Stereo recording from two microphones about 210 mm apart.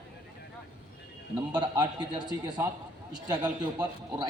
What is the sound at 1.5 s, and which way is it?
Speech, 20° right (ahead or behind).